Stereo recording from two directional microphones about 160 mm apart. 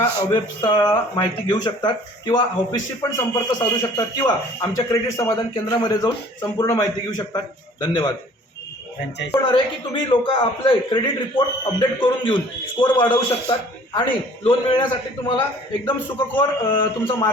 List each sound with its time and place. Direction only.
0.3 s speech: 25° left (ahead or behind)
9.3 s a man's voice: 30° left (ahead or behind)